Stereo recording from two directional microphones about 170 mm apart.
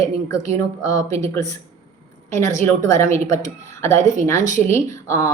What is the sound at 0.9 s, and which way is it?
A woman's voice, 20° left (ahead or behind).